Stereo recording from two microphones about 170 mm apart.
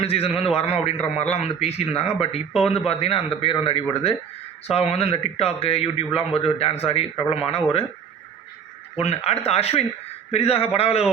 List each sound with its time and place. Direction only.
0.0 s a man's voice: 35° left (ahead or behind)
9.0 s a man's voice: 40° left (ahead or behind)